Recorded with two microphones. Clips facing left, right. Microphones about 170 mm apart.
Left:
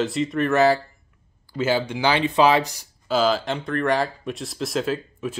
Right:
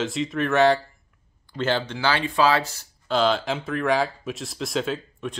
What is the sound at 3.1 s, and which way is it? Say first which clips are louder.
Speech: left 1 dB; 5° left (ahead or behind).